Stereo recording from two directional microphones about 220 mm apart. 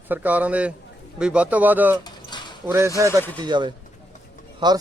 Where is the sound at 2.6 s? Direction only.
15° right (ahead or behind).